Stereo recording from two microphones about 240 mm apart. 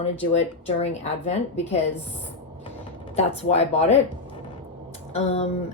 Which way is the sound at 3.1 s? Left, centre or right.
Left.